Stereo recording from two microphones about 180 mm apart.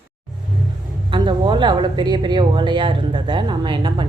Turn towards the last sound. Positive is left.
turn(degrees=-25)  # may be behind; listen again after turning